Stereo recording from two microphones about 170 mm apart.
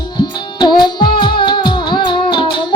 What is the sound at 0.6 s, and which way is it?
Music, 25° left (ahead or behind).